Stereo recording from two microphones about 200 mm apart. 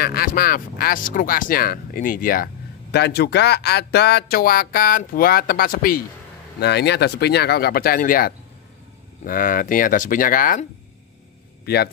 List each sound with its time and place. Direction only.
0.0 s speech: 45° left (ahead or behind)